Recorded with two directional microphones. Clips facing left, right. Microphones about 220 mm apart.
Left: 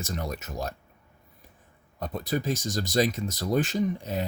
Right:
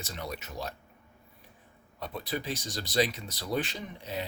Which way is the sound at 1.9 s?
45° left (ahead or behind).